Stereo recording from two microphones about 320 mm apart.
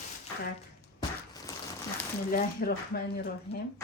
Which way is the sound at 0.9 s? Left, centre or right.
Centre.